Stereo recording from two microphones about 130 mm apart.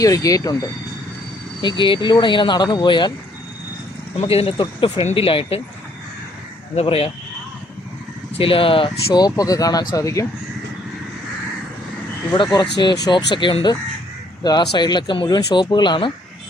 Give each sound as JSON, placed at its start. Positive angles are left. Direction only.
{"t": 0.0, "sound": "speech", "side_deg": 25}
{"t": 1.6, "sound": "speech", "side_deg": 40}
{"t": 4.2, "sound": "speech", "side_deg": 45}
{"t": 6.7, "sound": "speech", "side_deg": 50}
{"t": 8.4, "sound": "speech", "side_deg": 45}
{"t": 12.3, "sound": "speech", "side_deg": 35}